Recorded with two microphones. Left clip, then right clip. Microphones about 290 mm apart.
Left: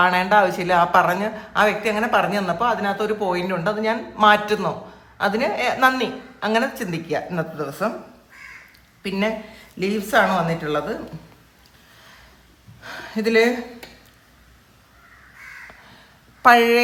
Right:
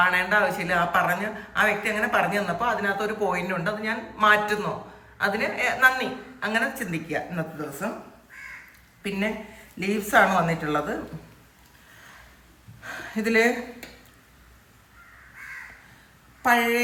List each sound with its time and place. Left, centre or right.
0.0 s a woman's voice: centre
9.0 s a woman's voice: centre
12.8 s speech: centre
16.4 s a woman's voice: centre